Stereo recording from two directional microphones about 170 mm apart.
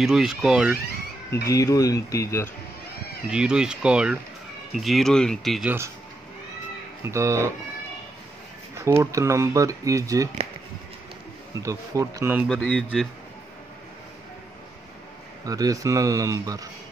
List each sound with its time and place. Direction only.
0.0 s speech: centre (ahead or behind)
1.5 s speech: 20° left (ahead or behind)
3.3 s speech: 5° right (ahead or behind)
7.0 s speech: 15° right (ahead or behind)
8.7 s speech: 15° right (ahead or behind)
11.6 s speech: 20° right (ahead or behind)
12.4 s speech: 5° left (ahead or behind)
15.4 s speech: 20° right (ahead or behind)